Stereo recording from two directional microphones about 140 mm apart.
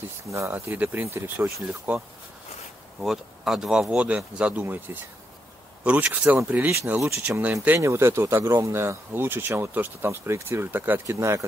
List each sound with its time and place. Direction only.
0.3 s speech: 20° right (ahead or behind)